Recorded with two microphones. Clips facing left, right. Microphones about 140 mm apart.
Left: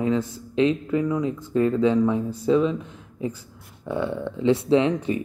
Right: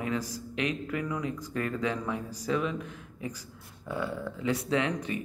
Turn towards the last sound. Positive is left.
turn(degrees=30)  # may be behind; listen again after turning